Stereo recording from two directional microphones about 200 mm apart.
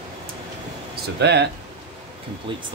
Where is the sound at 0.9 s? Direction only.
55° right (ahead or behind).